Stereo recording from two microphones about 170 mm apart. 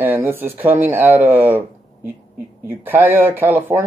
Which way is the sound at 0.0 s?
10° right (ahead or behind).